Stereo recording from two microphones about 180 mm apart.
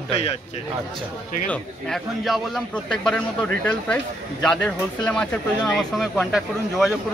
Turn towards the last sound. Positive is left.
turn(degrees=0)  # may be behind; listen again after turning